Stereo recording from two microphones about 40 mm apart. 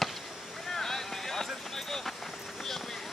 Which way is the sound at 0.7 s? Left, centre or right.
Centre.